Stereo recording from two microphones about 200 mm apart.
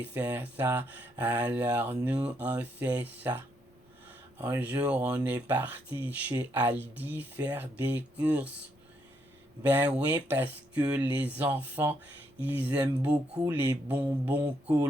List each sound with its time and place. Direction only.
0.0 s speech: 10° right (ahead or behind)
9.6 s speech: 10° right (ahead or behind)
14.4 s speech: 20° right (ahead or behind)